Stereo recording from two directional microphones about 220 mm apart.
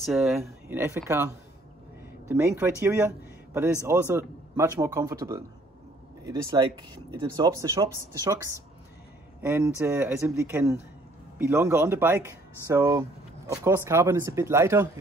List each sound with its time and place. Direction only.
0.0 s speech: centre (ahead or behind)
6.5 s speech: 20° right (ahead or behind)
9.4 s speech: 10° right (ahead or behind)